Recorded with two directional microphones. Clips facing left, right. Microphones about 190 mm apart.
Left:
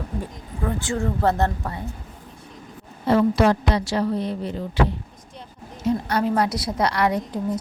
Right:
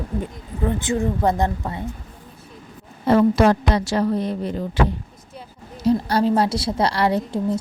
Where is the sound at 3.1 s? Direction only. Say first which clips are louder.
Right 2 dB; 45° right (ahead or behind).